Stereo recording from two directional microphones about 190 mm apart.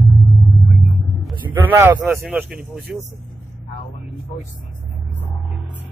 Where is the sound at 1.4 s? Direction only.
10° right (ahead or behind).